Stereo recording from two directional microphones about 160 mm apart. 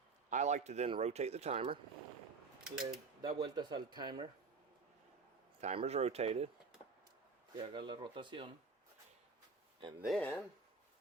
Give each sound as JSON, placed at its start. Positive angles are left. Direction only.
{"t": 0.3, "sound": "a man's voice", "side_deg": -50}
{"t": 2.6, "sound": "speech", "side_deg": -5}
{"t": 3.2, "sound": "speech", "side_deg": -30}
{"t": 5.5, "sound": "speech", "side_deg": -45}
{"t": 7.7, "sound": "speech", "side_deg": -30}
{"t": 10.1, "sound": "speech", "side_deg": 10}